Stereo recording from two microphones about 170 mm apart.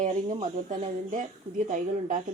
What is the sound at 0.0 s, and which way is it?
A woman's voice, 45° right (ahead or behind).